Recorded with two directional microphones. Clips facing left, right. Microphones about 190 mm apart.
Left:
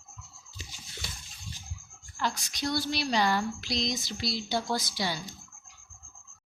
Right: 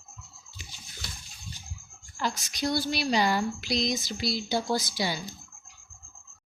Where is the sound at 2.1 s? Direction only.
10° right (ahead or behind).